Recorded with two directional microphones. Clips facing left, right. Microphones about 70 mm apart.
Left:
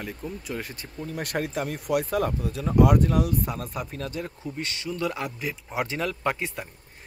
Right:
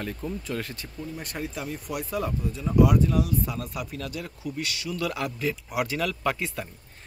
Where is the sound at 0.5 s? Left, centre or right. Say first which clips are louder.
Right 1 dB; left.